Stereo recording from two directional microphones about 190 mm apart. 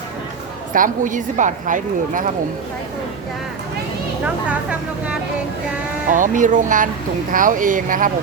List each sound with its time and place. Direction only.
0.7 s a woman's voice: 45° right (ahead or behind)
6.1 s a woman's voice: 45° right (ahead or behind)